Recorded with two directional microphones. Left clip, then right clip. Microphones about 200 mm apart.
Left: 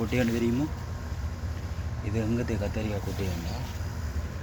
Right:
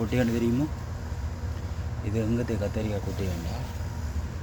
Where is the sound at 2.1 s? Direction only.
20° right (ahead or behind).